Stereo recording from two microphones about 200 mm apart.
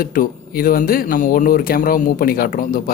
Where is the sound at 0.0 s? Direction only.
45° left (ahead or behind).